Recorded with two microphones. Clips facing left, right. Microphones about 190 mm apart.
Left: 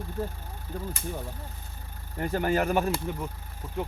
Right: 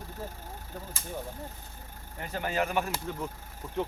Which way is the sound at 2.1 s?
45° left (ahead or behind).